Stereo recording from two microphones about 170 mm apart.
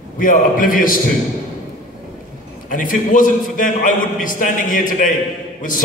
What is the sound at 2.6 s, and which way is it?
A man's voice, 50° left (ahead or behind).